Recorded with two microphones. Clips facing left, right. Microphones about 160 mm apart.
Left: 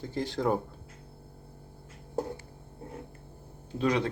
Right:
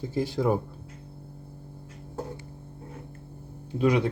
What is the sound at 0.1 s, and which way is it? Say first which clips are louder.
Speech: right 3 dB; 10° right (ahead or behind).